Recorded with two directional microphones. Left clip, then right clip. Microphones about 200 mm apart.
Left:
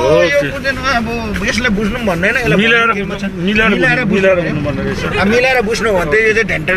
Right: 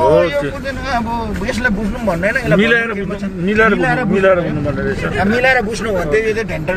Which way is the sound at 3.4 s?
10° left (ahead or behind).